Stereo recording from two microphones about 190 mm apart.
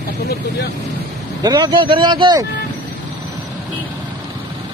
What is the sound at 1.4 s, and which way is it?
Speech, 20° right (ahead or behind).